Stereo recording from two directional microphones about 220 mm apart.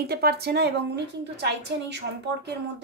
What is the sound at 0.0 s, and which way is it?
A child's voice, 45° right (ahead or behind).